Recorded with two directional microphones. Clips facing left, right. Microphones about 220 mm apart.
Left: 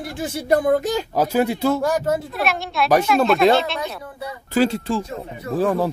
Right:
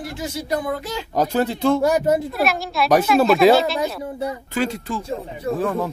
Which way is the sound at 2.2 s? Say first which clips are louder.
Right 2 dB; 5° right (ahead or behind).